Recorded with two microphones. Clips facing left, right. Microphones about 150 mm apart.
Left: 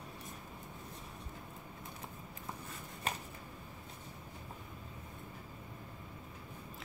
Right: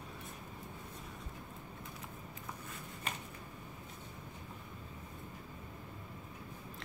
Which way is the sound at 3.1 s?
35° left (ahead or behind).